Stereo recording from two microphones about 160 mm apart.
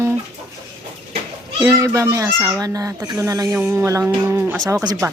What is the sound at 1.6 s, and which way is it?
Speech, 20° right (ahead or behind).